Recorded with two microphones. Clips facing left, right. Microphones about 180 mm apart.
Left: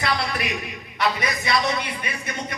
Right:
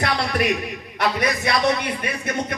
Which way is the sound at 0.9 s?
50° right (ahead or behind).